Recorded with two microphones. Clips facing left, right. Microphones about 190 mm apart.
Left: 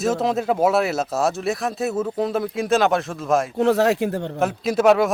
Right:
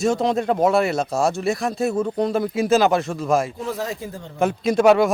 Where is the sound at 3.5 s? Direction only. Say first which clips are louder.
Left 10 dB; 70° left (ahead or behind).